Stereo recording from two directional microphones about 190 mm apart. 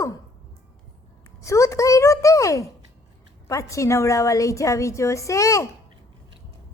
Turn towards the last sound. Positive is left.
turn(degrees=15)  # may be behind; listen again after turning